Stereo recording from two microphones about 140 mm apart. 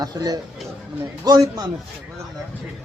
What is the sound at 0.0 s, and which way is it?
Speech, 25° right (ahead or behind).